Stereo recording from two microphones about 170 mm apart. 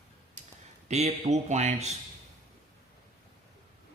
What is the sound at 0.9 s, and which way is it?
Speech, 40° right (ahead or behind).